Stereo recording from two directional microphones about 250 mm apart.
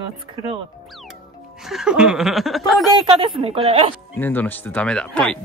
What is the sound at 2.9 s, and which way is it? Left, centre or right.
A woman's voice, centre.